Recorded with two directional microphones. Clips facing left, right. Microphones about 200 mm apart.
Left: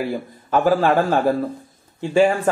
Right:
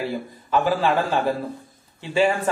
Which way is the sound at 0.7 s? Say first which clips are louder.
Left 6 dB; 45° left (ahead or behind).